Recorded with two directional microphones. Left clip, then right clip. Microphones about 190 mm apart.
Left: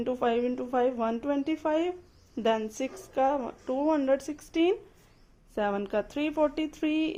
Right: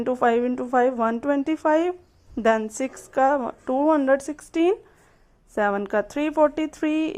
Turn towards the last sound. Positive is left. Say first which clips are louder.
# right 5 dB
turn(degrees=-20)  # may be behind; listen again after turning